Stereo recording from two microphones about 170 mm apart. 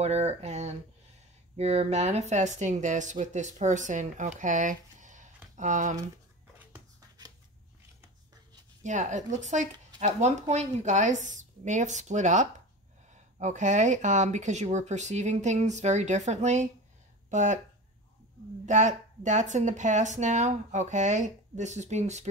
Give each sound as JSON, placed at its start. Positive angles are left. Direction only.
{"t": 0.0, "sound": "speech", "side_deg": -40}
{"t": 6.6, "sound": "a sound", "side_deg": -20}
{"t": 8.8, "sound": "speech", "side_deg": -45}
{"t": 18.7, "sound": "speech", "side_deg": -45}